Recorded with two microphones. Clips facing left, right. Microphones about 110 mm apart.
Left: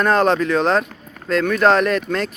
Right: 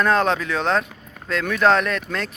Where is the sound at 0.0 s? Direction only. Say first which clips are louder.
Left 3 dB; centre (ahead or behind).